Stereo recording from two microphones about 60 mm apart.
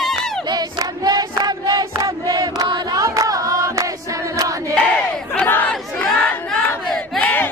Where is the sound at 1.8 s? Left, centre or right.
Right.